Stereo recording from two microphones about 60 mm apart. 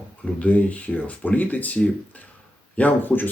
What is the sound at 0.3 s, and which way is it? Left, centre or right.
Speech, left.